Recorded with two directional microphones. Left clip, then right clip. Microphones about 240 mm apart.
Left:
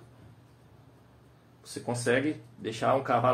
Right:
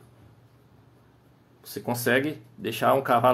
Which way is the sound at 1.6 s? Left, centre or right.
Right.